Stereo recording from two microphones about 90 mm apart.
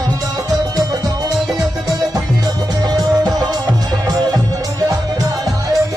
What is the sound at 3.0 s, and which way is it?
Music, 50° right (ahead or behind).